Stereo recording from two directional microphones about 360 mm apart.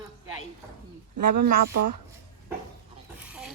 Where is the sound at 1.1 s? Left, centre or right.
Right.